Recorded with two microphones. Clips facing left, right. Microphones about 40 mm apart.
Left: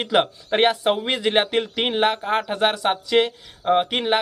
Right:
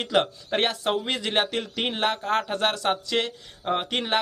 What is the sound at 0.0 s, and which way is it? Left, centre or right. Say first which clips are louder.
Speech: left 3 dB; left.